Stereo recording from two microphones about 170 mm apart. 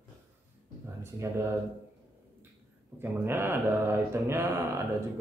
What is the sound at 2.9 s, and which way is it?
A man's voice, 15° right (ahead or behind).